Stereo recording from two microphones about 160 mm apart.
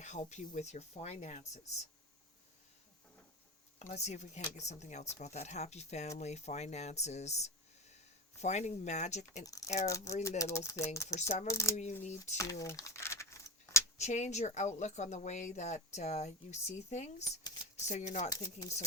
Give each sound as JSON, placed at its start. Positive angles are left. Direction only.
{"t": 0.0, "sound": "speech", "side_deg": 45}
{"t": 3.8, "sound": "speech", "side_deg": 45}
{"t": 9.4, "sound": "speech", "side_deg": 20}
{"t": 11.2, "sound": "speech", "side_deg": 45}
{"t": 11.4, "sound": "speech", "side_deg": 20}
{"t": 12.0, "sound": "speech", "side_deg": 45}
{"t": 12.4, "sound": "crumpling", "side_deg": 20}
{"t": 14.0, "sound": "speech", "side_deg": 45}
{"t": 17.2, "sound": "shuffling cards", "side_deg": 20}
{"t": 17.8, "sound": "speech", "side_deg": 45}
{"t": 18.3, "sound": "speech", "side_deg": 25}